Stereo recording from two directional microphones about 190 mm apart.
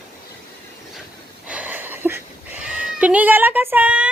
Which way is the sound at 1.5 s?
10° right (ahead or behind).